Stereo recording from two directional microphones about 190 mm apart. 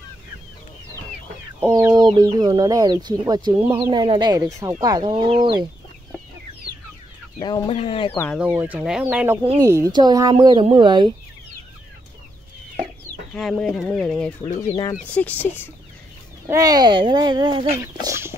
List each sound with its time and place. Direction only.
1.7 s speech: 20° right (ahead or behind)
7.3 s speech: 20° left (ahead or behind)
8.4 s speech: 10° right (ahead or behind)
13.3 s speech: 5° left (ahead or behind)
16.4 s speech: 20° right (ahead or behind)
18.0 s chicken: 15° right (ahead or behind)